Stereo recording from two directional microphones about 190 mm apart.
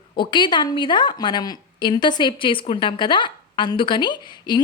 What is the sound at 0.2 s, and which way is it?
A woman's voice, 25° left (ahead or behind).